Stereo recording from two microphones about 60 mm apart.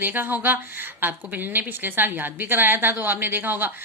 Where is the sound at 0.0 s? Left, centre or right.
Right.